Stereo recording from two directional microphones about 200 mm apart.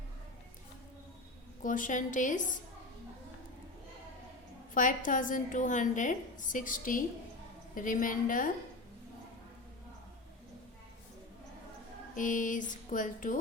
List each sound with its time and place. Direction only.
1.6 s a woman's voice: 40° left (ahead or behind)
4.7 s a woman's voice: 40° left (ahead or behind)
12.1 s a woman's voice: 40° left (ahead or behind)